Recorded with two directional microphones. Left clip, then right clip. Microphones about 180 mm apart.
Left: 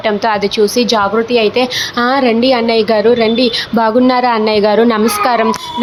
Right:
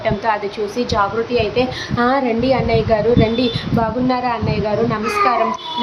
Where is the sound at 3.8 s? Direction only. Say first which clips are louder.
Left 8 dB; 35° left (ahead or behind).